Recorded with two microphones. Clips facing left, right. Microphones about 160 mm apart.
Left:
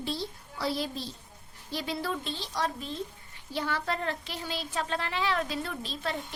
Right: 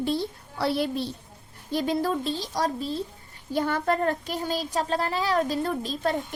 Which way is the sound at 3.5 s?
45° right (ahead or behind).